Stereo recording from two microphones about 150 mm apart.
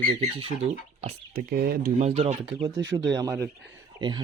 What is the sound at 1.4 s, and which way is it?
Speech, 90° right.